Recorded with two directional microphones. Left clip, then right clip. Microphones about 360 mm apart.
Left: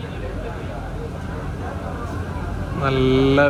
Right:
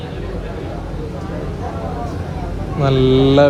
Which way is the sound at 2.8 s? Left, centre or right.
Centre.